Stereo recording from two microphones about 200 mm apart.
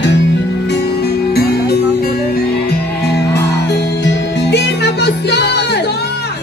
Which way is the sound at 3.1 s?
55° left (ahead or behind).